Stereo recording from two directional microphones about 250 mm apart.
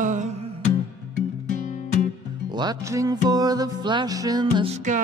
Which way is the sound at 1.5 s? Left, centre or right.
Left.